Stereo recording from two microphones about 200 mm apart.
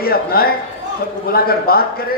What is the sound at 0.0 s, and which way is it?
A man's voice, 50° left (ahead or behind).